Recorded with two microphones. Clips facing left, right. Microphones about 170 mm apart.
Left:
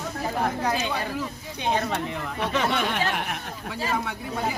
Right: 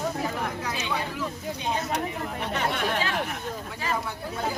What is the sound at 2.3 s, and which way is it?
Speech, 90° left.